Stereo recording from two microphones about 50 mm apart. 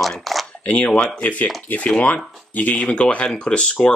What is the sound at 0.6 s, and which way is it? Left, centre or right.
Speech, left.